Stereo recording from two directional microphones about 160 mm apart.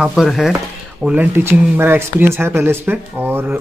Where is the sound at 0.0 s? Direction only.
Centre (ahead or behind).